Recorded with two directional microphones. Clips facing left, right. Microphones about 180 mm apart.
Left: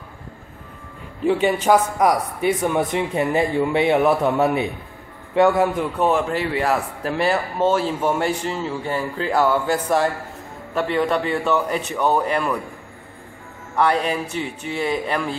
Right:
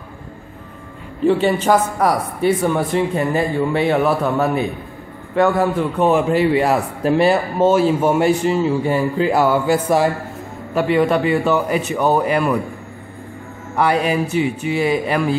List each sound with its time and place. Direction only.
1.2 s a man's voice: 10° left (ahead or behind)
6.1 s a man's voice: 15° right (ahead or behind)
13.7 s a man's voice: 10° right (ahead or behind)